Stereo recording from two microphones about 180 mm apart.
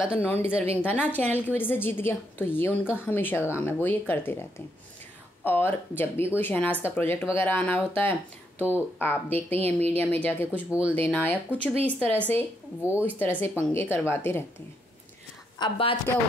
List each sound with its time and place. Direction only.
0.2 s speech: 10° left (ahead or behind)
10.7 s speech: 5° right (ahead or behind)
11.0 s speech: 10° left (ahead or behind)
15.6 s a woman's voice: 30° left (ahead or behind)